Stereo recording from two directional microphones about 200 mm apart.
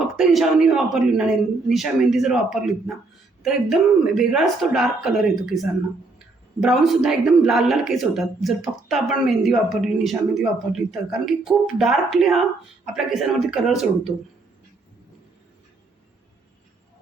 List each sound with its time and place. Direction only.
0.0 s a man's voice: centre (ahead or behind)